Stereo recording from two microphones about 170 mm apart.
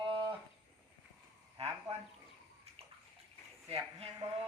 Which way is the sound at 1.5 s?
35° right (ahead or behind).